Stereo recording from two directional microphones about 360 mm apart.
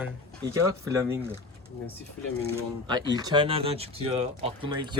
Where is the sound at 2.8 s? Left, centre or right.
Centre.